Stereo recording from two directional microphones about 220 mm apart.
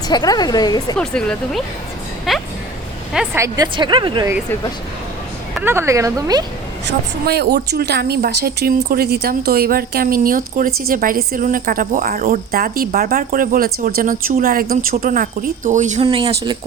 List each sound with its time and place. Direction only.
0.1 s a woman's voice: 20° left (ahead or behind)
0.9 s speech: 5° left (ahead or behind)
3.3 s a woman's voice: 15° right (ahead or behind)
5.5 s speech: 10° right (ahead or behind)
7.3 s a woman's voice: 45° right (ahead or behind); by 16.3 s 25° right (ahead or behind)